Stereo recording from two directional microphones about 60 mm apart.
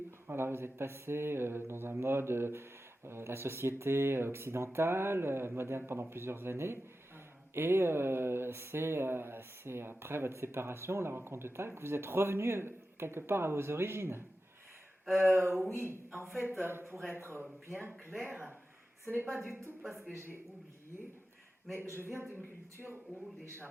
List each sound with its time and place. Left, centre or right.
0.3 s speech: right
21.8 s speech: right